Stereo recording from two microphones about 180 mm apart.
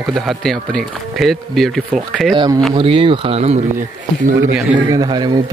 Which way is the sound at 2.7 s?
30° right (ahead or behind).